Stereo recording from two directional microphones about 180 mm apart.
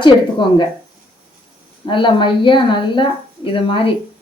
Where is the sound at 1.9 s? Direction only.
25° left (ahead or behind).